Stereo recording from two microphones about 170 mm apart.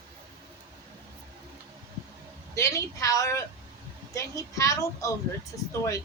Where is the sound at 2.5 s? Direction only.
20° left (ahead or behind).